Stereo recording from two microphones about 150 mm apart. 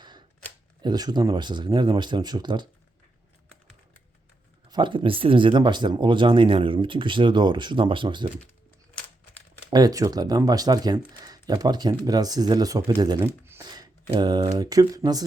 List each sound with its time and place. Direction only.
0.8 s speech: 30° right (ahead or behind)
4.7 s speech: 30° right (ahead or behind)
9.6 s speech: 25° right (ahead or behind)
13.1 s speech: 15° right (ahead or behind)
13.7 s speech: 30° right (ahead or behind)